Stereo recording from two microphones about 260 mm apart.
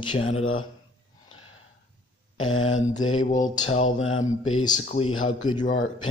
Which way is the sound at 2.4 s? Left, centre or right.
Left.